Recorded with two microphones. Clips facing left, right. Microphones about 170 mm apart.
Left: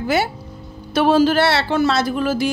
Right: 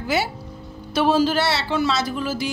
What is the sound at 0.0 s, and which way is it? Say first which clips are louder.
Speech: left 4 dB; 55° left (ahead or behind).